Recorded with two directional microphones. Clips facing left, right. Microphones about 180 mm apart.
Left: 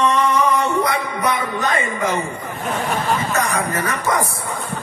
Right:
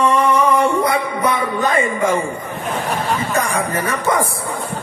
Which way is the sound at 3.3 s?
30° right (ahead or behind).